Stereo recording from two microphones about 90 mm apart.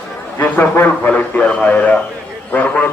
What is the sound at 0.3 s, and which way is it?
A man's voice, 15° left (ahead or behind).